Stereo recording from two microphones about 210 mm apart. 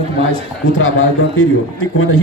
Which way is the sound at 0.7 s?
75° left (ahead or behind).